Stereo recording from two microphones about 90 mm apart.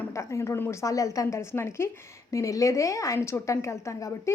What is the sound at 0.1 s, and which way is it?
A woman's voice, 35° left (ahead or behind).